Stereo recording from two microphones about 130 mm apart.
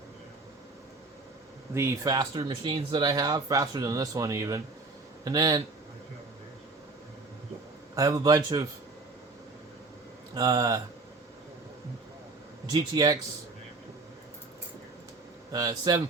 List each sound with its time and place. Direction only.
1.7 s a man's voice: 20° right (ahead or behind)
7.9 s a man's voice: 25° right (ahead or behind)
10.3 s a man's voice: 30° right (ahead or behind)
12.7 s speech: 30° right (ahead or behind)
15.5 s speech: 30° right (ahead or behind)